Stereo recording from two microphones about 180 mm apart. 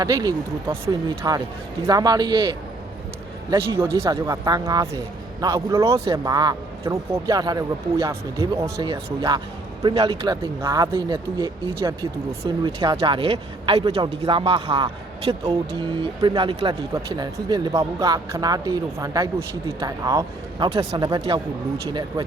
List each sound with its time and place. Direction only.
0.0 s speech: 20° right (ahead or behind)
3.8 s speech: 15° right (ahead or behind)
19.4 s speech: 30° right (ahead or behind)
20.1 s speech: 20° right (ahead or behind)
20.7 s speech: 30° right (ahead or behind)